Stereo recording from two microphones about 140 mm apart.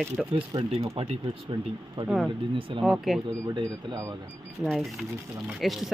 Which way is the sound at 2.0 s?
30° right (ahead or behind).